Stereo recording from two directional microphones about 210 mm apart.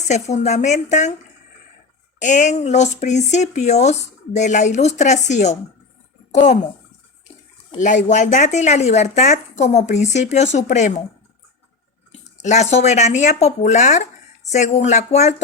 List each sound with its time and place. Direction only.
0.1 s speech: 35° left (ahead or behind)
2.1 s speech: 35° left (ahead or behind)
7.7 s speech: 35° left (ahead or behind)
12.4 s speech: 35° left (ahead or behind)